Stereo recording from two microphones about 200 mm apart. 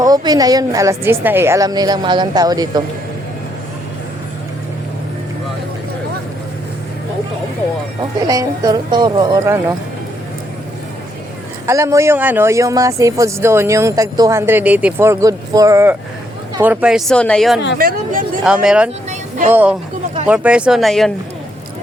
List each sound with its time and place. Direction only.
0.0 s a woman's voice: 20° right (ahead or behind)
8.3 s speech: 15° right (ahead or behind)
11.6 s speech: 15° right (ahead or behind); by 17.6 s centre (ahead or behind)
17.7 s speech: 45° right (ahead or behind)
18.4 s speech: 5° right (ahead or behind)
20.2 s speech: 5° right (ahead or behind)